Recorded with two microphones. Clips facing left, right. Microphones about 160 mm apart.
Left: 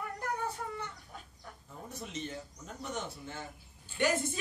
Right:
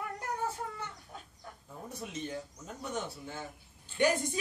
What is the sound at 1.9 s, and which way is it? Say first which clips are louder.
Speech: right 2 dB; 10° right (ahead or behind).